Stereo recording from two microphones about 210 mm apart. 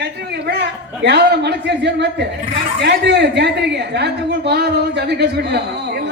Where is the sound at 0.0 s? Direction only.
55° right (ahead or behind).